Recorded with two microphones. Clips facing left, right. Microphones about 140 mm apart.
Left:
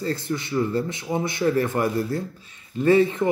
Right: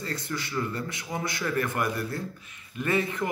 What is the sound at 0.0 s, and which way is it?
A man's voice, 25° left (ahead or behind).